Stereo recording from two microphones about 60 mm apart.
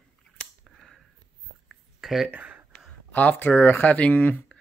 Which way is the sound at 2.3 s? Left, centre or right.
Right.